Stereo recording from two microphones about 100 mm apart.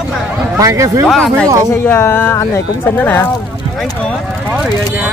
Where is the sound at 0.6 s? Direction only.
35° right (ahead or behind).